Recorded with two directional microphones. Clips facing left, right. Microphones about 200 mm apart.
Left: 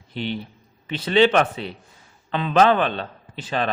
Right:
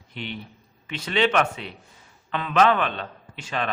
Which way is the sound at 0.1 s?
35° left (ahead or behind).